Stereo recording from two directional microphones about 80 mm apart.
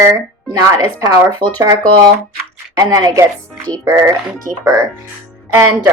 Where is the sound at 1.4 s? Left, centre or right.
Right.